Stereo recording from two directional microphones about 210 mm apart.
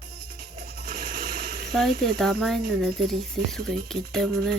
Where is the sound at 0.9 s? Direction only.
45° right (ahead or behind).